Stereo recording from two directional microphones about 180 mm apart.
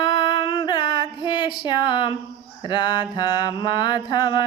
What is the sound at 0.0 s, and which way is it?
Music, 25° left (ahead or behind).